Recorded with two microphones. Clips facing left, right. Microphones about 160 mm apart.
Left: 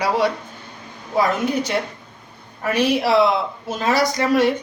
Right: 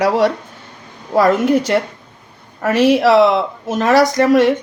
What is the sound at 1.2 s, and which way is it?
Speech, 90° right.